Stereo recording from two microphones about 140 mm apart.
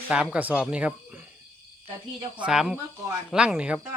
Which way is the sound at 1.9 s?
35° right (ahead or behind).